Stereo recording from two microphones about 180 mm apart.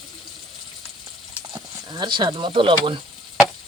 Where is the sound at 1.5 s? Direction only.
25° right (ahead or behind).